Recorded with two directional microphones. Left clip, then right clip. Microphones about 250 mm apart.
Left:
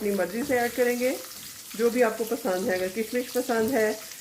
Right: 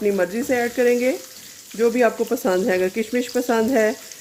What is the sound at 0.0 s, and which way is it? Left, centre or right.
Frying, right.